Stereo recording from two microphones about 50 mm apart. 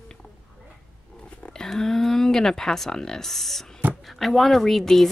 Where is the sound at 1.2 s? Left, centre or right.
Left.